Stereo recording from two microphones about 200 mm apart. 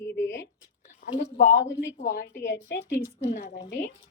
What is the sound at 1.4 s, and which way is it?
A woman's voice, 55° left (ahead or behind).